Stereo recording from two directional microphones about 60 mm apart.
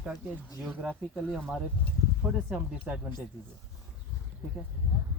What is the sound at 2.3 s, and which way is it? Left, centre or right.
Speech, centre.